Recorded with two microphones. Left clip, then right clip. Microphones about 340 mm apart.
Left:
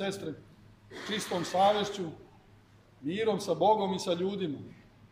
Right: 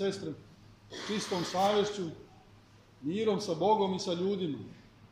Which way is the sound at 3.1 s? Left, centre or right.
Left.